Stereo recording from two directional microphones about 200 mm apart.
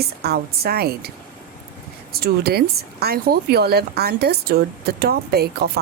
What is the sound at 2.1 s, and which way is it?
Speech, 50° right (ahead or behind).